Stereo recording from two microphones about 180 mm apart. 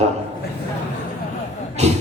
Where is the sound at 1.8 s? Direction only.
35° right (ahead or behind).